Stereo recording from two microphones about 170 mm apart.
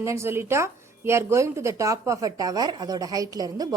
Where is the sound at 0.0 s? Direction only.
15° right (ahead or behind).